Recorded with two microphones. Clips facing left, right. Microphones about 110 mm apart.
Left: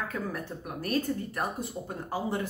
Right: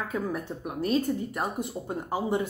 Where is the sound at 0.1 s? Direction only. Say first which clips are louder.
Right 4 dB; 20° right (ahead or behind).